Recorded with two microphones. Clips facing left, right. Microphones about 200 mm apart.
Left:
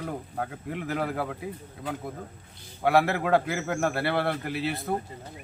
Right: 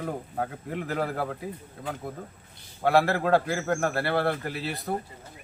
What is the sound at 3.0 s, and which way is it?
A man's voice, 15° left (ahead or behind).